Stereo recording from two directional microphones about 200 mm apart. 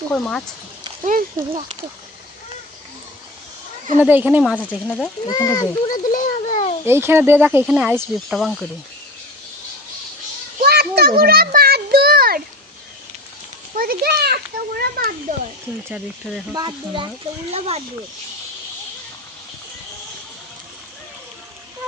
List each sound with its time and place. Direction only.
0.1 s speech: 5° left (ahead or behind)
1.0 s speech: 35° right (ahead or behind)
4.0 s speech: 10° right (ahead or behind)
4.5 s speech: 5° left (ahead or behind)
5.3 s speech: 20° left (ahead or behind)
5.9 s a sound: 40° left (ahead or behind)
6.8 s speech: 10° right (ahead or behind)
10.6 s children playing: 50° right (ahead or behind)
13.7 s a child's voice: 50° right (ahead or behind)
16.6 s speech: 20° right (ahead or behind)